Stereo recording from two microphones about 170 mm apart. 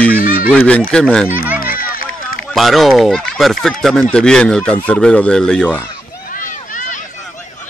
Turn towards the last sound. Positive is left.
turn(degrees=50)  # may be behind; listen again after turning